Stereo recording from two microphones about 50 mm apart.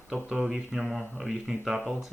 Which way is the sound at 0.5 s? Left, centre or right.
Centre.